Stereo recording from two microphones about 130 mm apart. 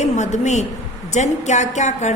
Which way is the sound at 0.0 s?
65° left (ahead or behind).